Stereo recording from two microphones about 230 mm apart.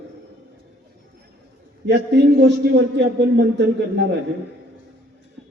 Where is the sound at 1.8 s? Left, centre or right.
Right.